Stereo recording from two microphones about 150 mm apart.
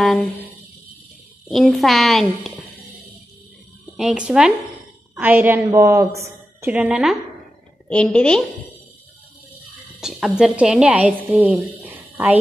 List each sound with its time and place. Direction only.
0.0 s a sound: centre (ahead or behind)
1.5 s a child's voice: centre (ahead or behind)
3.9 s a child's voice: 5° right (ahead or behind)
7.9 s a child's voice: 5° left (ahead or behind)
9.9 s a woman's voice: 5° right (ahead or behind)